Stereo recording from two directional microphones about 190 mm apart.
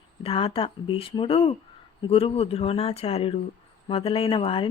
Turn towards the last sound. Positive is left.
turn(degrees=25)  # may be behind; listen again after turning